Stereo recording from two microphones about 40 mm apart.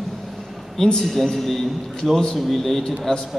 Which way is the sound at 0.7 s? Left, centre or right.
Centre.